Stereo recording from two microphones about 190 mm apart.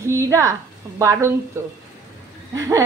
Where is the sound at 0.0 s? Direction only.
15° right (ahead or behind).